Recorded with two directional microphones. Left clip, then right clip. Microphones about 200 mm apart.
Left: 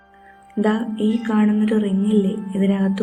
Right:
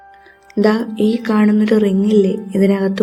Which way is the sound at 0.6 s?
40° right (ahead or behind).